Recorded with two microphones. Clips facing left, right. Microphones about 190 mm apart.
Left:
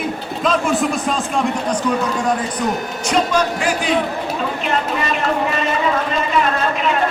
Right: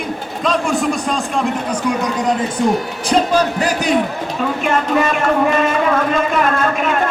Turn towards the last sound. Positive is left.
turn(degrees=-50)  # may be behind; listen again after turning